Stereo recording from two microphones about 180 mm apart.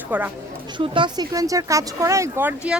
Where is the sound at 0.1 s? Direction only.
10° right (ahead or behind).